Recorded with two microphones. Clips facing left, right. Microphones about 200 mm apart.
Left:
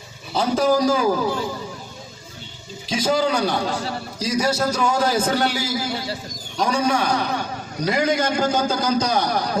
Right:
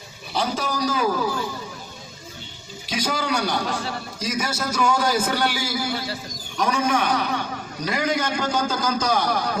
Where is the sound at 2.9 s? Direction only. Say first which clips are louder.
Left 5 dB; 25° left (ahead or behind).